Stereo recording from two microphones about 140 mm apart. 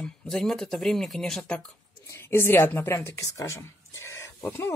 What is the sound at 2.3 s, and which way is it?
Speech, 20° left (ahead or behind).